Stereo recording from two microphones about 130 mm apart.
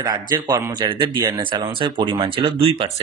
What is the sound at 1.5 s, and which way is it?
Speech, 35° right (ahead or behind).